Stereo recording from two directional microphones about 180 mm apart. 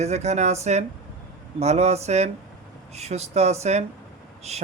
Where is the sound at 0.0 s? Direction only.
40° right (ahead or behind).